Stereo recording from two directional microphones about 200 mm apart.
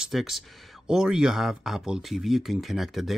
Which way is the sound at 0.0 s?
Centre (ahead or behind).